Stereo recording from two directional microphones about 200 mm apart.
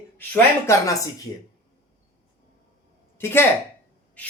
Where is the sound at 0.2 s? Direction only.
10° left (ahead or behind).